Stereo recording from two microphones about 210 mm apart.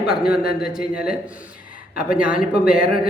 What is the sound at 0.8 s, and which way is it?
Speech, 45° left (ahead or behind).